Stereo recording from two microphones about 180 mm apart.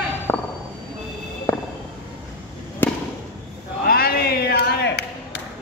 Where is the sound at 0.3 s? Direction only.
15° left (ahead or behind).